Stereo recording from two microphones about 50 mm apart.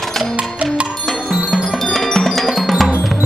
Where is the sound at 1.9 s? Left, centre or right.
Centre.